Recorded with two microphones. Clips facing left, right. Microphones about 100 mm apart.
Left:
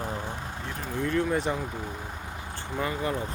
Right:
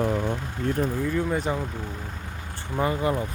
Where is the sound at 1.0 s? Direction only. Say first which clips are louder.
Right 1 dB; 5° right (ahead or behind).